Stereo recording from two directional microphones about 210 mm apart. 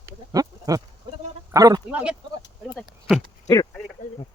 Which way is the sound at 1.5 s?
15° right (ahead or behind).